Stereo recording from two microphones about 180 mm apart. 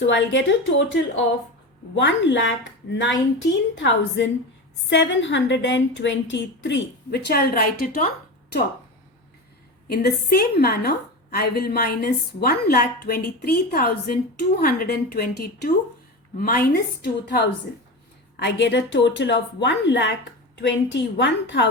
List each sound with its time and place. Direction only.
0.0 s a woman's voice: 85° left; by 8.0 s 55° left (ahead or behind)
9.8 s a woman's voice: 55° left (ahead or behind); by 21.7 s 80° left